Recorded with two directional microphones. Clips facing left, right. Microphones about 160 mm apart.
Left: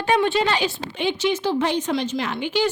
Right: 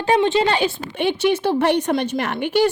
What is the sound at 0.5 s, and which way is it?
A woman's voice, 60° right (ahead or behind).